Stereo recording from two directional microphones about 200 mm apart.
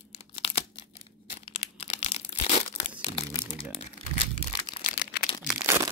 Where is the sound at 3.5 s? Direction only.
30° left (ahead or behind).